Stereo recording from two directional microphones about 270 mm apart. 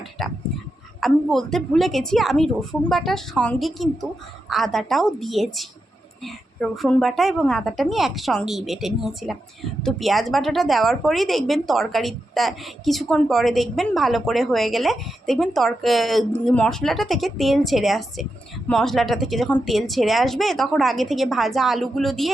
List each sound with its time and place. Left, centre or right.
0.2 s a woman's voice: centre